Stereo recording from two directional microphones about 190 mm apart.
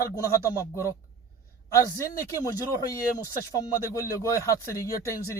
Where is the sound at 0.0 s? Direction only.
15° left (ahead or behind).